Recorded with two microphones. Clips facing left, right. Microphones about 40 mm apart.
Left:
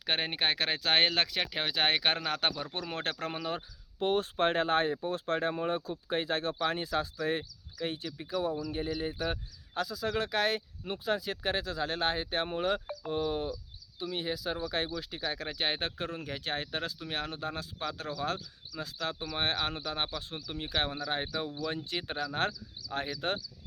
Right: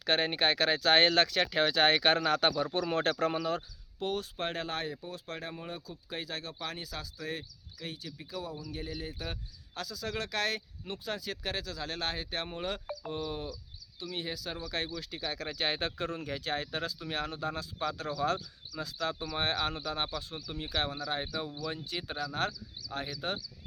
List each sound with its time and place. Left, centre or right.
0.0 s speech: centre
4.0 s speech: left